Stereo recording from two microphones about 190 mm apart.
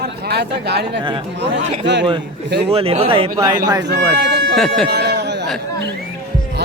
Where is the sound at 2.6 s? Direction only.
30° right (ahead or behind).